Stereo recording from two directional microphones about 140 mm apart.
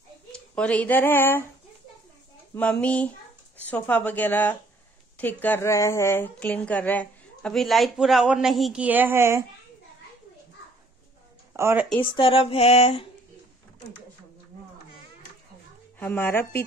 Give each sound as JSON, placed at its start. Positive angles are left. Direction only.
{"t": 0.3, "sound": "speech", "side_deg": 10}
{"t": 2.5, "sound": "a woman's voice", "side_deg": 10}
{"t": 8.8, "sound": "speech", "side_deg": -15}
{"t": 11.5, "sound": "speech", "side_deg": -20}
{"t": 12.0, "sound": "speech", "side_deg": 40}
{"t": 16.0, "sound": "a woman's voice", "side_deg": 15}